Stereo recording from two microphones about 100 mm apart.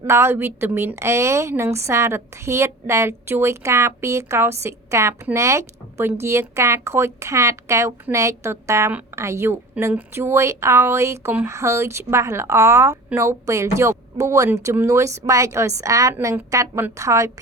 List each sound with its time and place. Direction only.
0.1 s a woman's voice: 25° right (ahead or behind)